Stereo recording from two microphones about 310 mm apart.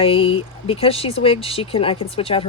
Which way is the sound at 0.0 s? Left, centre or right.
Centre.